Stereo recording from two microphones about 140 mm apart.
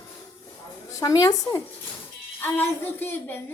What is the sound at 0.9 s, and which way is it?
Speech, 25° left (ahead or behind).